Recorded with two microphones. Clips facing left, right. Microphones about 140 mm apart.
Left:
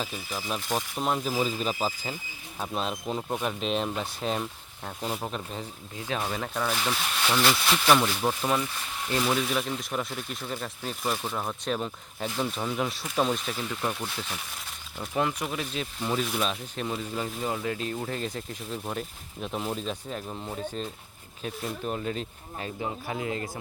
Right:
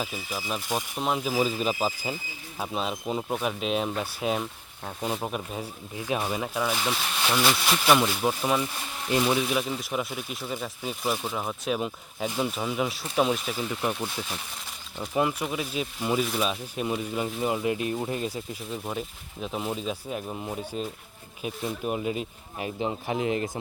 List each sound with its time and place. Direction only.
0.0 s speech: 5° right (ahead or behind)
21.9 s speech: 10° right (ahead or behind)